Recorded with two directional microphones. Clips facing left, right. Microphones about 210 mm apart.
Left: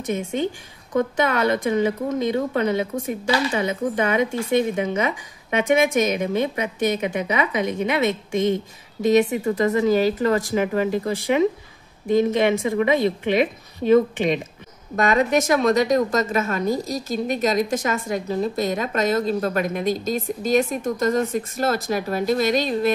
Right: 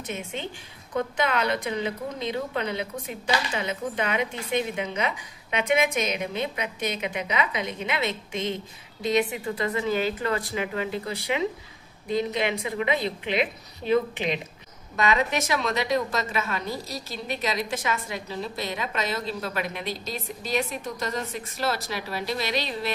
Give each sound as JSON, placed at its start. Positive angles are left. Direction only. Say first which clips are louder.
{"t": 0.0, "sound": "a woman's voice", "louder": "left 10 dB", "side_deg": 45}